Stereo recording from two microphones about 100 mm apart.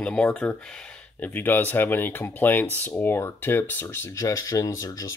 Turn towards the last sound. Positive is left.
turn(degrees=35)  # may be behind; listen again after turning